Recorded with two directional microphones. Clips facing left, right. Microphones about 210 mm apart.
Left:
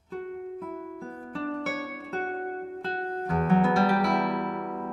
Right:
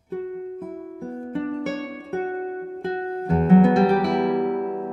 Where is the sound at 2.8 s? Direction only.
15° right (ahead or behind).